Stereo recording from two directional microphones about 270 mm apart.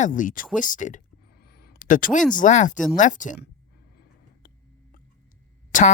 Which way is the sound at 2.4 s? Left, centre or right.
Left.